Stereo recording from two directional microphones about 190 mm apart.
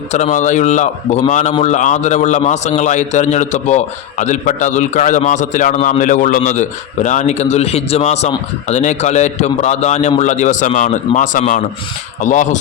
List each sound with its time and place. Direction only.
0.1 s a man's voice: 40° left (ahead or behind)